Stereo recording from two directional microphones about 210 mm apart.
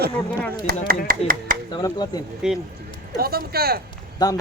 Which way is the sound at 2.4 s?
5° right (ahead or behind).